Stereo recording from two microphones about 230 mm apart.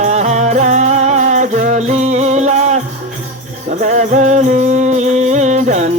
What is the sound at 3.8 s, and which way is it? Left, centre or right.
Music, right.